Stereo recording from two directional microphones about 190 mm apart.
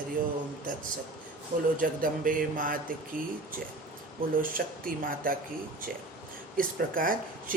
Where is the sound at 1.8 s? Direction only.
45° right (ahead or behind).